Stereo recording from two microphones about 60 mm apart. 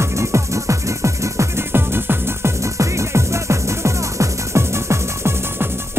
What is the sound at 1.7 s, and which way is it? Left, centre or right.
Music, right.